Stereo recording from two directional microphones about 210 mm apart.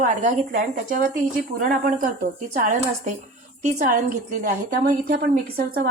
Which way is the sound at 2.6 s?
35° right (ahead or behind).